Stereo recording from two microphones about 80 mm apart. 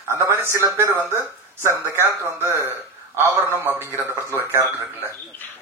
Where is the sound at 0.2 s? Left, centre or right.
Right.